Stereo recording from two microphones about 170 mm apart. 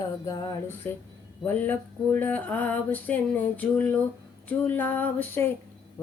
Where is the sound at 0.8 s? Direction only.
10° left (ahead or behind).